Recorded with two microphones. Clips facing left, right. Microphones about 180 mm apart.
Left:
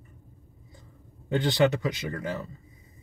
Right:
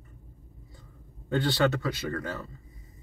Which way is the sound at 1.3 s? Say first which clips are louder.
Left 2 dB; 15° left (ahead or behind).